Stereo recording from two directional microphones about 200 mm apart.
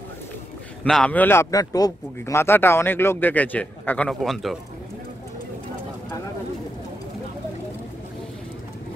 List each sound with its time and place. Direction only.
0.8 s a man's voice: 5° left (ahead or behind)